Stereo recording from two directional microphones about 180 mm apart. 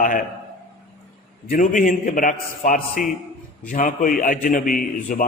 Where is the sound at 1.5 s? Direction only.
45° left (ahead or behind).